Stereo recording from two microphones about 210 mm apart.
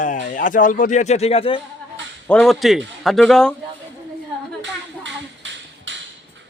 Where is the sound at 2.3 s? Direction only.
Centre (ahead or behind).